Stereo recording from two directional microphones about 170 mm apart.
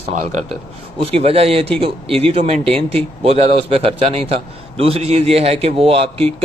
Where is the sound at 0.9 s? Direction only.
35° right (ahead or behind).